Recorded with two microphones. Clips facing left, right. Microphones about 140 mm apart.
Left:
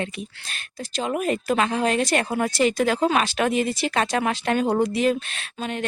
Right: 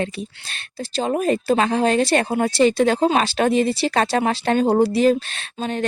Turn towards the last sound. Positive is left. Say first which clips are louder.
# right 4 dB
turn(degrees=-35)  # may be behind; listen again after turning